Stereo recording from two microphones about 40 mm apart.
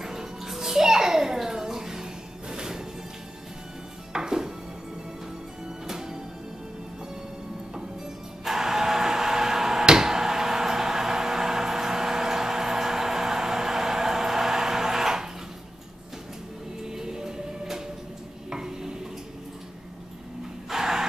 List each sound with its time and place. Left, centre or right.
0.0 s music: centre
4.1 s music: centre
5.9 s music: centre
8.5 s a sound: centre
16.8 s music: centre
18.5 s stir: centre
20.7 s gasp: centre